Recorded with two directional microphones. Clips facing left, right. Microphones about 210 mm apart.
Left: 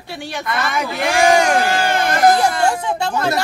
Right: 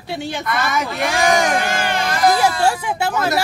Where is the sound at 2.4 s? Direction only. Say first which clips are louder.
Even; 5° right (ahead or behind).